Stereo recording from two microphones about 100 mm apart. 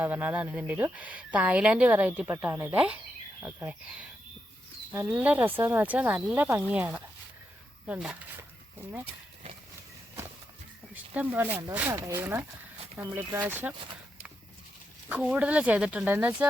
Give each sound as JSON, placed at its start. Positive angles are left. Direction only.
{"t": 0.0, "sound": "speech", "side_deg": -15}
{"t": 2.7, "sound": "speech", "side_deg": -15}
{"t": 5.0, "sound": "speech", "side_deg": -15}
{"t": 10.9, "sound": "speech", "side_deg": -15}
{"t": 11.9, "sound": "speech", "side_deg": -30}
{"t": 15.1, "sound": "speech", "side_deg": -10}